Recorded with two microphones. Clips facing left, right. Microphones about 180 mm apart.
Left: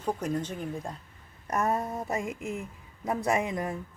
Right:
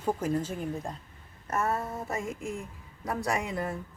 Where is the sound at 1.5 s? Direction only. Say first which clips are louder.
Left 2 dB; 15° left (ahead or behind).